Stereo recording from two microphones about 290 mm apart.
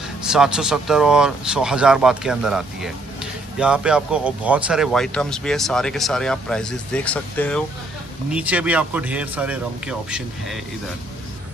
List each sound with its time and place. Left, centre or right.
0.2 s speech: centre